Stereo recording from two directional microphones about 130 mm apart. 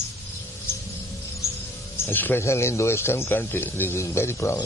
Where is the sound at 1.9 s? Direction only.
15° left (ahead or behind).